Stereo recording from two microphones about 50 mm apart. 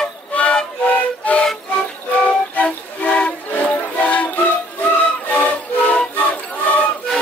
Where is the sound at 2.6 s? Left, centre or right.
Left.